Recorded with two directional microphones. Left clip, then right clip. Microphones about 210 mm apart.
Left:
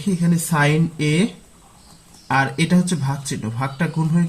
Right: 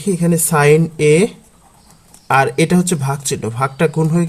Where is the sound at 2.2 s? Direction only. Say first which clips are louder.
Right 6 dB; 55° right (ahead or behind).